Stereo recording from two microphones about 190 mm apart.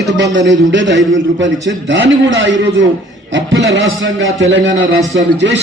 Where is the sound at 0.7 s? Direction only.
75° right (ahead or behind).